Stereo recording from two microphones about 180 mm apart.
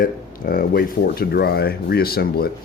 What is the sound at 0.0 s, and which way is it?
Speech, 50° left (ahead or behind).